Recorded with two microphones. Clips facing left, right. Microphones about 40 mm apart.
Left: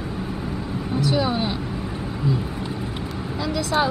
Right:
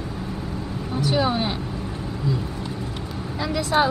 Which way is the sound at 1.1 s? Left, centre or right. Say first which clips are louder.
Right 2 dB; centre.